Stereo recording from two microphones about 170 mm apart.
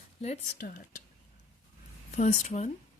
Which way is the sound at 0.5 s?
60° left (ahead or behind).